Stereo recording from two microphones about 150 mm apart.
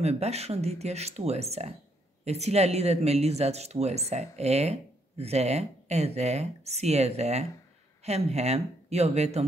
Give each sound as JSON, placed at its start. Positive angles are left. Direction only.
{"t": 0.0, "sound": "speech", "side_deg": -45}